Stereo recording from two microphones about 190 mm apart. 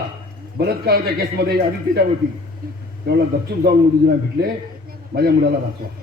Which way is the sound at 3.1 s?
60° right (ahead or behind).